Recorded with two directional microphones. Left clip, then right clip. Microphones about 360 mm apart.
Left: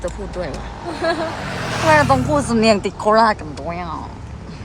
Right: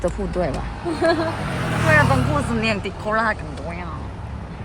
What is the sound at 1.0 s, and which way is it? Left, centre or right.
Speech, left.